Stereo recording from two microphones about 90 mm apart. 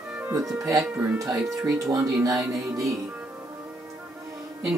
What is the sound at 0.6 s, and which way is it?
Speech, 40° right (ahead or behind).